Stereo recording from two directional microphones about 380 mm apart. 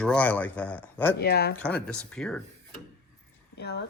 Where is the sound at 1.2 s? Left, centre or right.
Left.